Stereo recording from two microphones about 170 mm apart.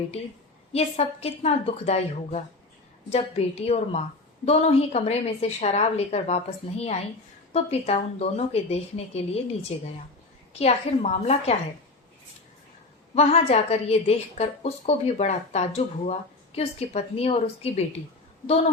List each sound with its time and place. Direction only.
0.7 s a woman's voice: 35° left (ahead or behind)
13.1 s a woman's voice: 40° left (ahead or behind)